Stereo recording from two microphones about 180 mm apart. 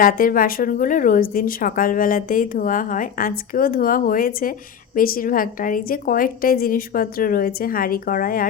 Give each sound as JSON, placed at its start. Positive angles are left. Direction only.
{"t": 0.0, "sound": "speech", "side_deg": 50}